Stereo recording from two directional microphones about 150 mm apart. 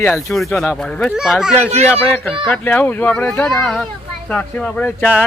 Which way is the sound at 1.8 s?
15° left (ahead or behind).